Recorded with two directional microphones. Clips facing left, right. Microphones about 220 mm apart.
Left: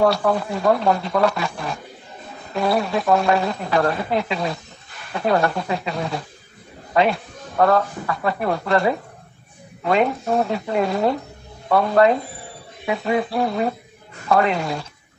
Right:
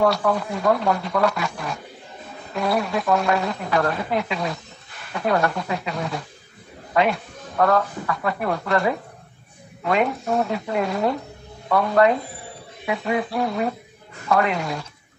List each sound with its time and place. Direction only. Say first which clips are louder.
0.0 s a man's voice: left 2 dB; 30° left (ahead or behind)